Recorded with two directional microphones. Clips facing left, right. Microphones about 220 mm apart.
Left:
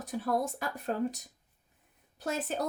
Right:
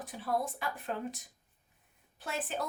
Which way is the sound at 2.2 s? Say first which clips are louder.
Left 4 dB; 40° left (ahead or behind).